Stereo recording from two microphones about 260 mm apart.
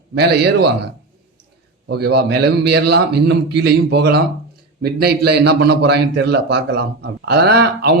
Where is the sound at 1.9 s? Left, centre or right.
Right.